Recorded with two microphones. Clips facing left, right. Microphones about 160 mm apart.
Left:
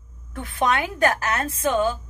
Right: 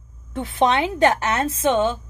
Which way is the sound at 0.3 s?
25° right (ahead or behind).